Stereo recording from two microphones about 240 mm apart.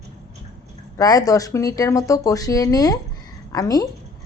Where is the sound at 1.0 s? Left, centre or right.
Centre.